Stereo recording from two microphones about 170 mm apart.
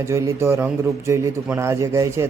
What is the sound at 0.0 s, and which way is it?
A man's voice, 15° right (ahead or behind).